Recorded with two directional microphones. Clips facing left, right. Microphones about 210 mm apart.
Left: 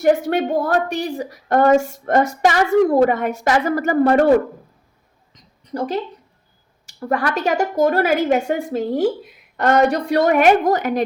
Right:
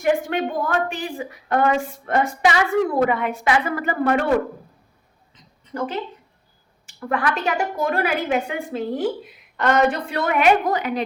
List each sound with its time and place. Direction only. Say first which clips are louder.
0.0 s a woman's voice: left 4 dB; 40° left (ahead or behind)
5.3 s a sound: left 4 dB; 40° left (ahead or behind)
6.8 s a woman's voice: left 2 dB; 40° left (ahead or behind)